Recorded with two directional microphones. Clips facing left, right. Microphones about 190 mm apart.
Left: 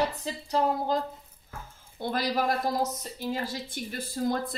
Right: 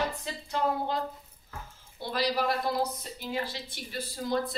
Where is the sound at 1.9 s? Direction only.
50° left (ahead or behind).